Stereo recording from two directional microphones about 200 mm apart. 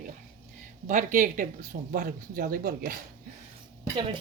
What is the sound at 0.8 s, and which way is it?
A woman's voice, 40° right (ahead or behind).